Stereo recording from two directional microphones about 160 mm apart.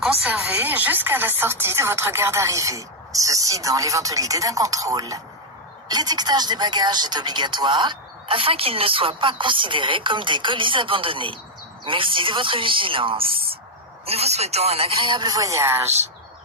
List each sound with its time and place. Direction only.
0.0 s speech: 5° right (ahead or behind)